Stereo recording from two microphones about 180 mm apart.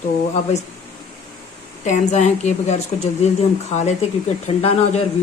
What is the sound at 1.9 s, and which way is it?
Speech, 40° left (ahead or behind).